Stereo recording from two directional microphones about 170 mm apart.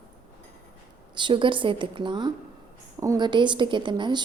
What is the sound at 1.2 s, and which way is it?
A woman's voice, 30° right (ahead or behind).